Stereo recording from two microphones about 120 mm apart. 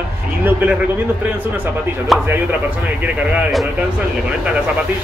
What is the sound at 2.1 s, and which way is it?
Speech, centre (ahead or behind).